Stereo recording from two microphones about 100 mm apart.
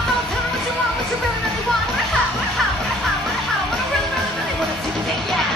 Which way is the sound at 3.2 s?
Centre (ahead or behind).